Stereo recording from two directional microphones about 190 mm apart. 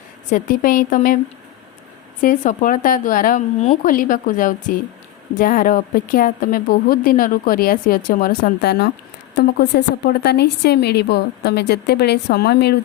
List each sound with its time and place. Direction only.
0.3 s a woman's voice: 45° left (ahead or behind)
2.2 s a woman's voice: 45° left (ahead or behind); by 12.8 s 60° left (ahead or behind)